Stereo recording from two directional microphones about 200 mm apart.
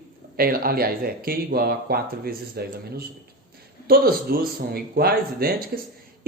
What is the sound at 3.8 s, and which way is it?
Speech, 50° right (ahead or behind).